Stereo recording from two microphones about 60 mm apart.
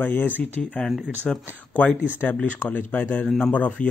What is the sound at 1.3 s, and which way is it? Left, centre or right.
Speech, centre.